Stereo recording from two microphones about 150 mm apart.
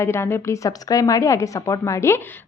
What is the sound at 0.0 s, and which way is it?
A woman's voice, 15° left (ahead or behind).